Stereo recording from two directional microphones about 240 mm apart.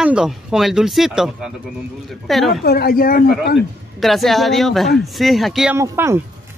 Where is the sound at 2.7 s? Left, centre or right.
Left.